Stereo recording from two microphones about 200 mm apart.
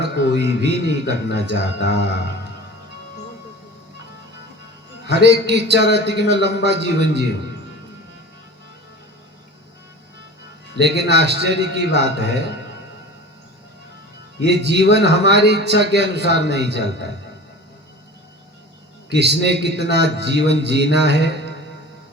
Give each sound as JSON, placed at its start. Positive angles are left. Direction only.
{"t": 0.0, "sound": "speech", "side_deg": -55}
{"t": 5.1, "sound": "speech", "side_deg": -60}
{"t": 10.8, "sound": "a man's voice", "side_deg": -55}
{"t": 14.4, "sound": "speech", "side_deg": -55}
{"t": 19.0, "sound": "speech", "side_deg": -55}